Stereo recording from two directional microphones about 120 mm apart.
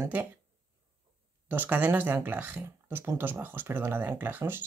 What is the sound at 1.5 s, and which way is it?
Speech, 15° right (ahead or behind).